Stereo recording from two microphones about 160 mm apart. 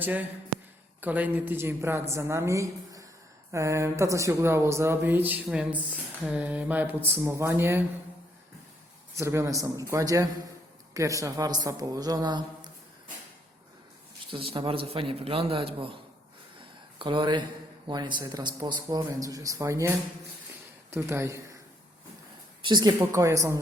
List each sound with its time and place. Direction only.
0.0 s speech: 10° right (ahead or behind)
9.1 s a man's voice: 15° right (ahead or behind)
14.3 s a man's voice: 35° right (ahead or behind)
17.0 s a man's voice: 30° right (ahead or behind)
22.6 s a man's voice: 25° right (ahead or behind)